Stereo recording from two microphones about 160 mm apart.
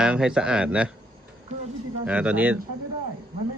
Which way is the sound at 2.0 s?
10° right (ahead or behind).